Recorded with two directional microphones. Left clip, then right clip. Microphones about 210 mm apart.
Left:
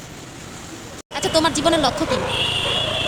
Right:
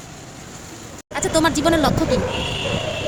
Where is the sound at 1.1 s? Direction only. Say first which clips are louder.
Even; 10° right (ahead or behind).